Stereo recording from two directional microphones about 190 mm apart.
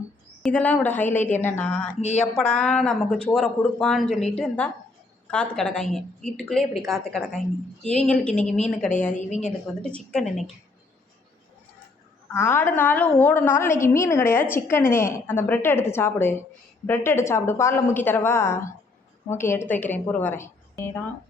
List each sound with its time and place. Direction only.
0.4 s a woman's voice: 10° left (ahead or behind)
2.0 s a woman's voice: 35° left (ahead or behind)
2.2 s a woman's voice: 5° left (ahead or behind)
9.1 s a woman's voice: 40° left (ahead or behind)
9.8 s a woman's voice: 5° left (ahead or behind)
12.3 s a woman's voice: 15° left (ahead or behind)